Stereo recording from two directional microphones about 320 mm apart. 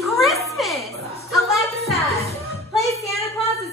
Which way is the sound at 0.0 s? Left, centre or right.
Centre.